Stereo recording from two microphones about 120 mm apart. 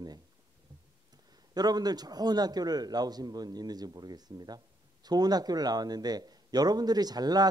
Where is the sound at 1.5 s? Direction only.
35° right (ahead or behind).